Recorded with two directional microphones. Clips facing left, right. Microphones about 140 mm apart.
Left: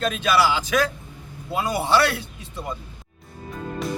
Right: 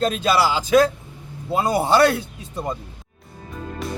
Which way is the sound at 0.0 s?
35° right (ahead or behind).